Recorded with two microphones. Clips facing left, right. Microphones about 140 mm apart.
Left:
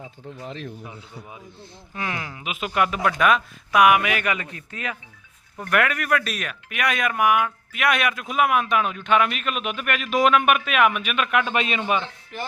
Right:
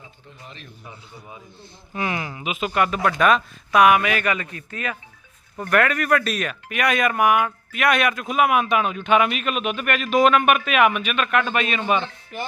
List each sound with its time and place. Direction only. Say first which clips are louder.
1.9 s speech: right 4 dB; 10° right (ahead or behind); by 4.9 s 20° left (ahead or behind)
5.7 s speech: right 3 dB; 5° left (ahead or behind)
11.5 s a man's voice: right 1 dB; 20° left (ahead or behind)
11.8 s speech: right 2 dB; 5° left (ahead or behind)